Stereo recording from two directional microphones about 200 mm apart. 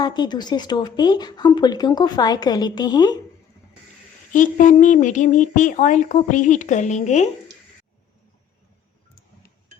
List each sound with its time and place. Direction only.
0.0 s speech: 20° left (ahead or behind)
4.3 s speech: 40° left (ahead or behind)